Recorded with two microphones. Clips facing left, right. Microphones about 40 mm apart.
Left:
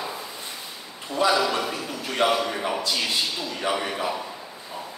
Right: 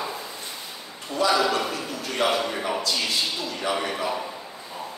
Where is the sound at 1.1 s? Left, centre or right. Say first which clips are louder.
Even; left.